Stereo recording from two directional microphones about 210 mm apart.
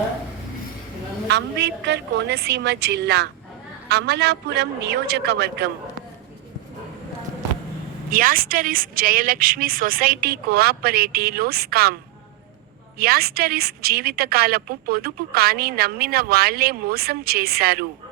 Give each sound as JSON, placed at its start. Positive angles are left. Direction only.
{"t": 1.3, "sound": "a woman's voice", "side_deg": -55}
{"t": 8.1, "sound": "a woman's voice", "side_deg": -45}
{"t": 13.0, "sound": "a woman's voice", "side_deg": -45}